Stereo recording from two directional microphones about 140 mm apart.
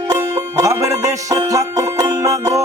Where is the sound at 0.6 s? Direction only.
25° right (ahead or behind).